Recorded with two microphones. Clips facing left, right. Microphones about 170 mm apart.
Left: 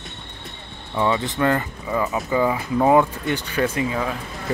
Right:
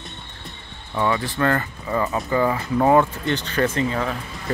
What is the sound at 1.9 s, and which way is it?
Speech, 5° left (ahead or behind).